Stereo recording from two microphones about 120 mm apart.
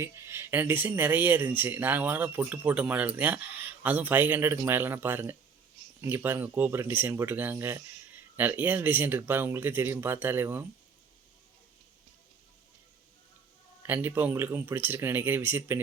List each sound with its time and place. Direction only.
0.0 s speech: 20° right (ahead or behind)
13.8 s speech: 20° right (ahead or behind)